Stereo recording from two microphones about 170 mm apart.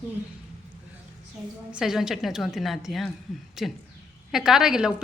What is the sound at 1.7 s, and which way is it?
A woman's voice, 5° right (ahead or behind).